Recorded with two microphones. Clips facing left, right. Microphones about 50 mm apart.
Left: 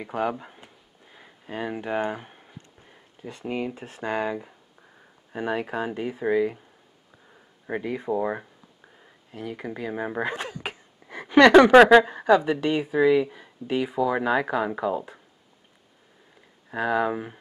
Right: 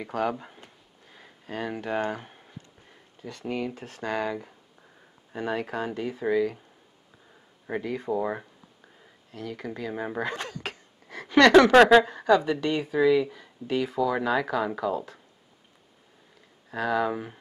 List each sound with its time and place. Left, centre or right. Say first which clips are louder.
0.0 s a sound: left 1 dB; centre
3.2 s speech: left 1 dB; centre
7.6 s speech: left 1 dB; centre
9.0 s a sound: left 2 dB; centre
9.8 s speech: left 2 dB; centre
16.7 s speech: left 2 dB; centre